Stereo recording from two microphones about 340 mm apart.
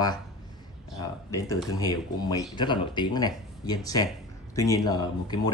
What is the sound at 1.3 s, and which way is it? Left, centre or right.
Speech, centre.